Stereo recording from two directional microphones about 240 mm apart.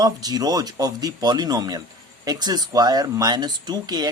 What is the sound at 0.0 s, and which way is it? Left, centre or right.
Speech, centre.